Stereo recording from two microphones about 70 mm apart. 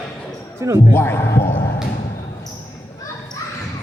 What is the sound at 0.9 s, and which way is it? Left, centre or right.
Speech, left.